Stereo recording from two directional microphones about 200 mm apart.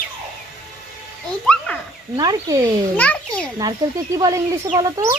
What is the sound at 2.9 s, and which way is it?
Speech, 5° left (ahead or behind).